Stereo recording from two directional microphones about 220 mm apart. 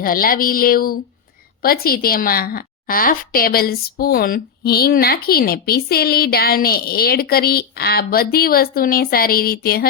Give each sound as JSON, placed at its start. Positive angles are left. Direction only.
{"t": 0.0, "sound": "a woman's voice", "side_deg": 40}